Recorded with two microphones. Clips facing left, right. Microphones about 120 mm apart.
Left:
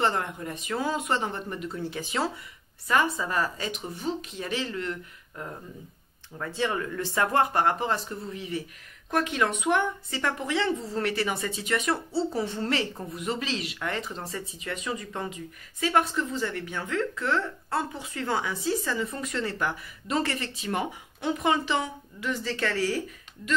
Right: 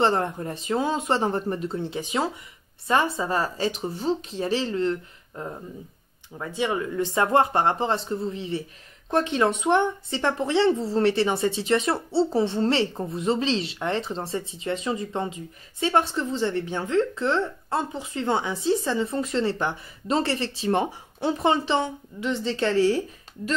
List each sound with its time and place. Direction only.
0.0 s a woman's voice: 35° right (ahead or behind)
6.3 s a woman's voice: 15° right (ahead or behind)